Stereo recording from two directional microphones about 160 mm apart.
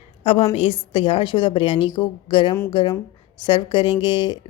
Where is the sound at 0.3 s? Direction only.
35° left (ahead or behind).